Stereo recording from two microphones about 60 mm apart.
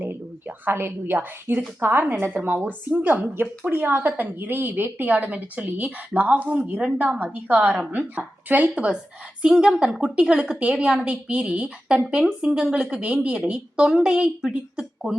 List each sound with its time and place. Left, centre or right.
0.0 s a woman's voice: right; by 15.1 s centre